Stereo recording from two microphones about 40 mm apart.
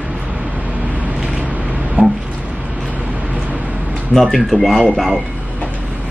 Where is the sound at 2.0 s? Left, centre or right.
Right.